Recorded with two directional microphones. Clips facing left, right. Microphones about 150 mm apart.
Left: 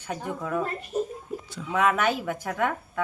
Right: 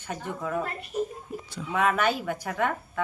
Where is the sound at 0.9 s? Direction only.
30° left (ahead or behind).